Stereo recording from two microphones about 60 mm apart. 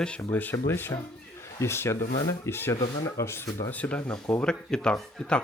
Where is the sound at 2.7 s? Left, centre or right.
Left.